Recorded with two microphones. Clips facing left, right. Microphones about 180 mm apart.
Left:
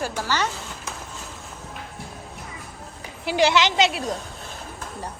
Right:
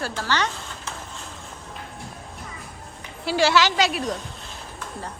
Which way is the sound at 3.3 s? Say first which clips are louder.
Even; 20° left (ahead or behind).